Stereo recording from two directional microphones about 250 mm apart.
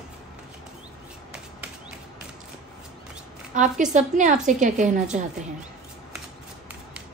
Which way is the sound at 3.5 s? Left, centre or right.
Right.